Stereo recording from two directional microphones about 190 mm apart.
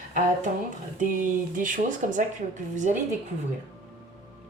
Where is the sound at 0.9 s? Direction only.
45° right (ahead or behind).